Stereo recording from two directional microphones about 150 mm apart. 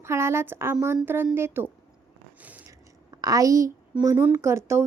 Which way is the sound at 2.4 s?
10° right (ahead or behind).